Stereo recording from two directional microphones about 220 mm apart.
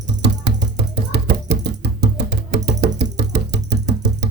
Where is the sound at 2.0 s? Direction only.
50° right (ahead or behind).